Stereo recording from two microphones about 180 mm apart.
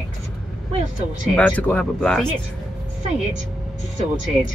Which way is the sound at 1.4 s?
5° left (ahead or behind).